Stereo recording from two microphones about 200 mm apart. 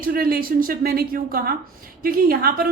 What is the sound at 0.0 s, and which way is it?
A woman's voice, 45° right (ahead or behind).